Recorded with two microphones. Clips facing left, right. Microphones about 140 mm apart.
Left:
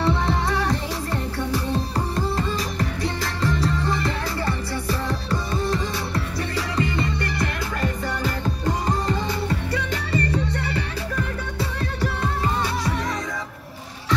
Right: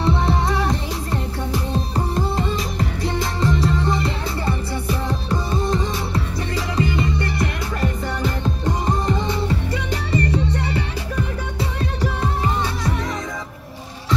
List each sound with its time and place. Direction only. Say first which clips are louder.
0.0 s music: right 2 dB; 25° right (ahead or behind)
8.8 s music: right 4 dB; 20° right (ahead or behind)